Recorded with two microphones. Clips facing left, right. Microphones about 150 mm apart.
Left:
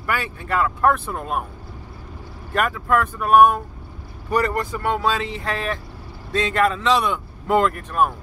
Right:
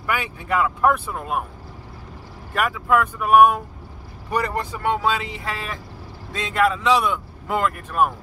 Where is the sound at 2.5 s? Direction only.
5° right (ahead or behind).